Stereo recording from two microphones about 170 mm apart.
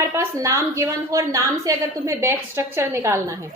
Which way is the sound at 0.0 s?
15° right (ahead or behind).